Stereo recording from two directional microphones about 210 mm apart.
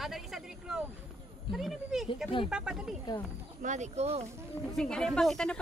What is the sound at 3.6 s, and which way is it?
Speech, 35° right (ahead or behind).